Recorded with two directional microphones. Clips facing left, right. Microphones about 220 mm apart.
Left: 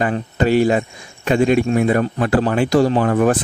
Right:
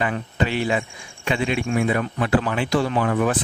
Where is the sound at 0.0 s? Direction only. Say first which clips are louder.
Left 6 dB; 45° left (ahead or behind).